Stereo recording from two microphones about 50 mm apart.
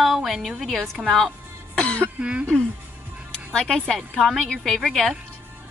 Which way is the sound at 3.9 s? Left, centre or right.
Centre.